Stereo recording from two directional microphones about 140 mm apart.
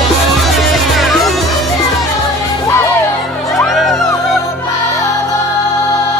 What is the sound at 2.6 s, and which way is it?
Music, 25° left (ahead or behind).